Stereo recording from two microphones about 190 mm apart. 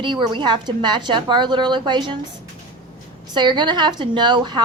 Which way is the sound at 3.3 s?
25° right (ahead or behind).